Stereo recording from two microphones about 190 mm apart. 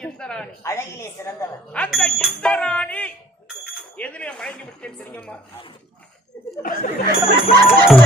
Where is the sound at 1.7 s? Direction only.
5° left (ahead or behind).